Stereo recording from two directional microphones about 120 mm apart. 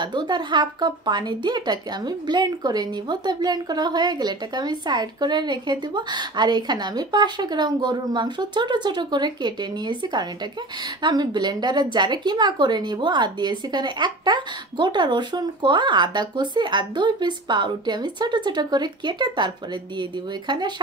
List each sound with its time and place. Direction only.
0.0 s speech: 40° right (ahead or behind)